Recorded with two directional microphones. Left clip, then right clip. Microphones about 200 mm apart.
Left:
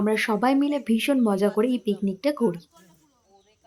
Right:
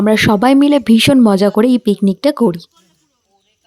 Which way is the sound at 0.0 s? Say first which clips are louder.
Right 11 dB; 40° right (ahead or behind).